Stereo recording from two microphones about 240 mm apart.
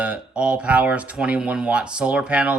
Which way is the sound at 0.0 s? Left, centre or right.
Centre.